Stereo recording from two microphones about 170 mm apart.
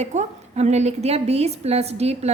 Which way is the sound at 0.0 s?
40° right (ahead or behind).